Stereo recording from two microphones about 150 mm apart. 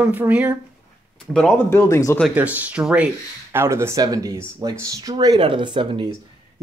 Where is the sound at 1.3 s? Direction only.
5° left (ahead or behind).